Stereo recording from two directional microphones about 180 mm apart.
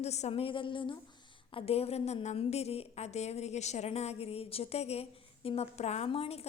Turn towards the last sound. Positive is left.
turn(degrees=35)  # may be behind; listen again after turning